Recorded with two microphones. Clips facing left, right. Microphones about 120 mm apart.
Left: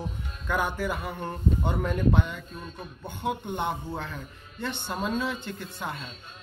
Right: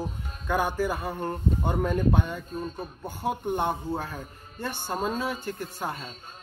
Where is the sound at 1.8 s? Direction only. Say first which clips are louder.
Even; 45° right (ahead or behind).